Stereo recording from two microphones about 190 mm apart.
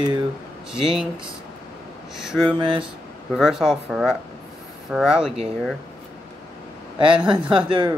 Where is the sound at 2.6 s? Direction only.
25° right (ahead or behind).